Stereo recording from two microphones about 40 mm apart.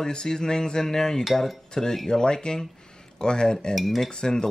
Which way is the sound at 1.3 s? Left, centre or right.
Centre.